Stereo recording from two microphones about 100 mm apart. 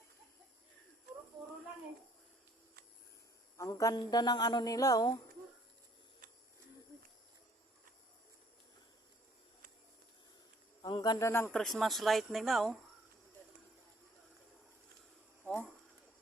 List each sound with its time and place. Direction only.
3.6 s speech: 35° left (ahead or behind)
10.8 s speech: 45° left (ahead or behind)
11.2 s speech: 30° left (ahead or behind)
11.4 s speech: 5° left (ahead or behind)